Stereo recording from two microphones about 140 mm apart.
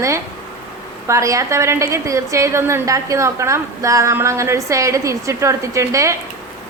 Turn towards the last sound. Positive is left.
turn(degrees=-20)  # may be behind; listen again after turning